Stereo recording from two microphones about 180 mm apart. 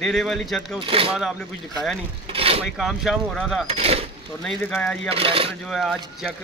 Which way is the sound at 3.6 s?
35° right (ahead or behind).